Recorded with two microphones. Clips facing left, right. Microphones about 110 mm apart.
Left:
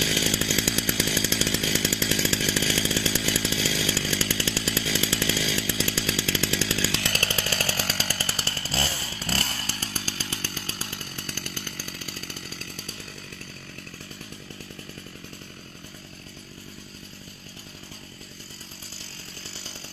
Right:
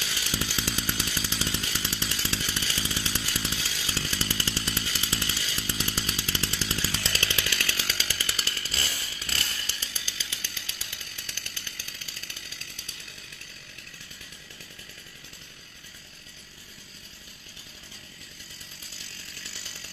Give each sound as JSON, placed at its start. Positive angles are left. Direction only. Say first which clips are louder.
{"t": 0.0, "sound": "chainsaw", "louder": "left 7 dB", "side_deg": 90}
{"t": 7.1, "sound": "chainsaw", "louder": "left 3 dB", "side_deg": 45}
{"t": 18.9, "sound": "chainsaw", "louder": "left 4 dB", "side_deg": 30}